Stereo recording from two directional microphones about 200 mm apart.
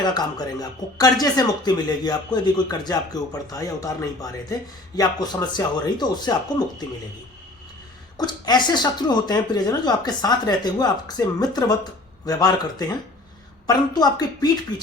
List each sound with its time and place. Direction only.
0.0 s speech: 20° left (ahead or behind)
8.2 s speech: 20° left (ahead or behind)
13.7 s speech: 20° left (ahead or behind)